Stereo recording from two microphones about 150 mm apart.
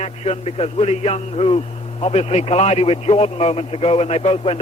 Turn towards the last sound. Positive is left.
turn(degrees=40)  # may be behind; listen again after turning